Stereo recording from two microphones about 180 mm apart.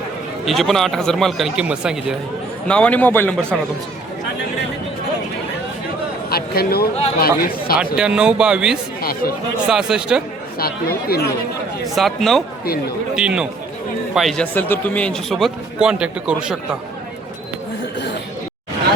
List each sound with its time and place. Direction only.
0.4 s a man's voice: centre (ahead or behind)
2.6 s a man's voice: 5° left (ahead or behind)
6.3 s speech: 60° left (ahead or behind)
7.9 s a man's voice: 5° right (ahead or behind)
9.0 s chatter: 55° left (ahead or behind)
9.6 s a man's voice: 5° right (ahead or behind)
10.6 s speech: 60° left (ahead or behind)
11.9 s a man's voice: centre (ahead or behind)